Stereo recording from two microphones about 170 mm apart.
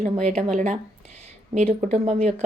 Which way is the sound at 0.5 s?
45° right (ahead or behind).